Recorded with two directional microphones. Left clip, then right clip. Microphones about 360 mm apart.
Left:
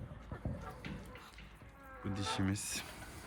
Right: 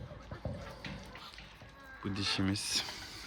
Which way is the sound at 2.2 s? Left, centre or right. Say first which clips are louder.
Right 4 dB; centre.